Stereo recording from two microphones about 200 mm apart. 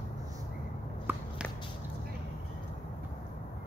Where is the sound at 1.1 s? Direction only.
10° right (ahead or behind).